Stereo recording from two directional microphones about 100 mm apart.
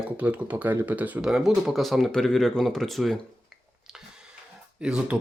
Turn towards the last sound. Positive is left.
turn(degrees=-10)  # may be behind; listen again after turning